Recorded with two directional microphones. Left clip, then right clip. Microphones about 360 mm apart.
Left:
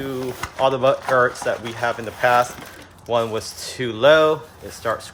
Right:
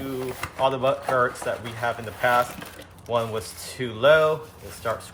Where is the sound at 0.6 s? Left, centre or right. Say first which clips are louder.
Left 5 dB; left.